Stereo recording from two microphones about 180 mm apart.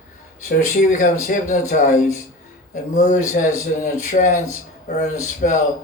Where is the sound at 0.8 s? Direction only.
45° left (ahead or behind).